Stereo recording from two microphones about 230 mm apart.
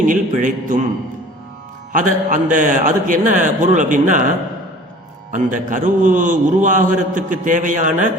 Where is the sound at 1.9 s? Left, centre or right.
Right.